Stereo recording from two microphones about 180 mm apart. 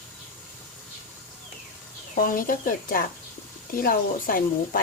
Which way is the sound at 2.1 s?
50° left (ahead or behind).